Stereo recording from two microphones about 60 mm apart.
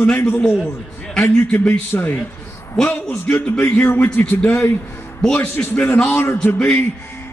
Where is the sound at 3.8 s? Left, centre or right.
Left.